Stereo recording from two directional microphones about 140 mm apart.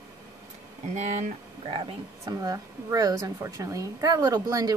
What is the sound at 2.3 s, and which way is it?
A woman's voice, 25° right (ahead or behind).